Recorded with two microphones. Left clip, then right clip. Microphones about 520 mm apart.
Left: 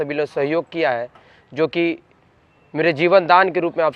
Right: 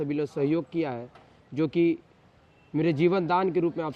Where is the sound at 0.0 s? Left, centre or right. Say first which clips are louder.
Left 7 dB; left.